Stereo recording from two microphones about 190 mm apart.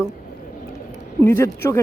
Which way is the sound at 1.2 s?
15° left (ahead or behind).